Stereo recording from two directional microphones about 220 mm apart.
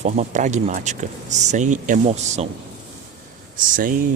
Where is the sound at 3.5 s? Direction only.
40° right (ahead or behind).